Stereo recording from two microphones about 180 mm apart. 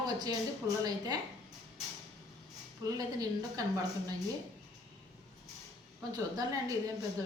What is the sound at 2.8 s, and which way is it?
A woman's voice, 20° right (ahead or behind).